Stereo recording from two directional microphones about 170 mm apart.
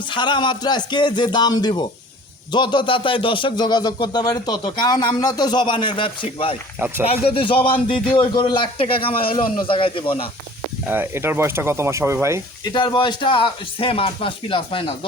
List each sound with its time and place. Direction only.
0.1 s speech: 25° left (ahead or behind)
6.7 s speech: 10° right (ahead or behind)
7.0 s a man's voice: 35° left (ahead or behind)
10.8 s speech: 10° right (ahead or behind)
12.6 s a man's voice: 25° left (ahead or behind)